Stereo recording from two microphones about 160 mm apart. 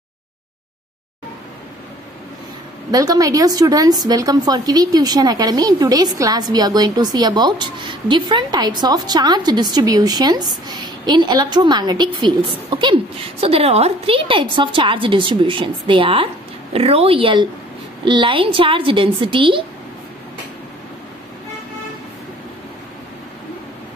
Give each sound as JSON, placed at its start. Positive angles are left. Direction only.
{"t": 2.9, "sound": "a woman's voice", "side_deg": -20}